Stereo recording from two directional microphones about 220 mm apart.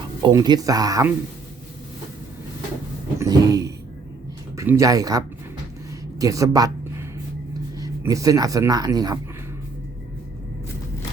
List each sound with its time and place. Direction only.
0.2 s speech: 20° right (ahead or behind)
3.2 s a sound: 15° right (ahead or behind)
4.5 s speech: 10° right (ahead or behind)